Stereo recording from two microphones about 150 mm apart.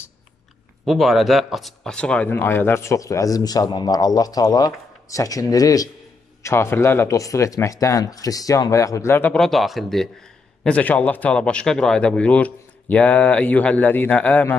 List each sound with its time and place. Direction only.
0.8 s speech: centre (ahead or behind)